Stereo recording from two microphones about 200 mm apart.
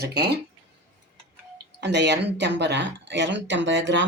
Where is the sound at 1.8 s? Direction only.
60° right (ahead or behind).